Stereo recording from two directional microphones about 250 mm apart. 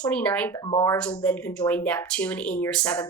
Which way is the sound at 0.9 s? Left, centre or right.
Centre.